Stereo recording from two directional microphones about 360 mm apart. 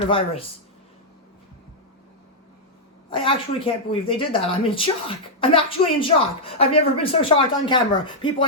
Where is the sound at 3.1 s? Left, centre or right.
Centre.